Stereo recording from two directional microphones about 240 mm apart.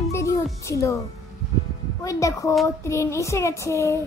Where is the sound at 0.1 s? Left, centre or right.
Centre.